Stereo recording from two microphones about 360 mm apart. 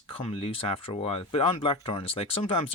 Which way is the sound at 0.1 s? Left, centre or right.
Centre.